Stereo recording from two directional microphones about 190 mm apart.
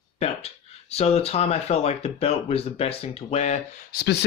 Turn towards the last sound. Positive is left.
turn(degrees=60)  # may be behind; listen again after turning